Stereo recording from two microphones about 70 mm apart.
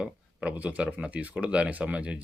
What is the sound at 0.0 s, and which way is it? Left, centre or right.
Speech, centre.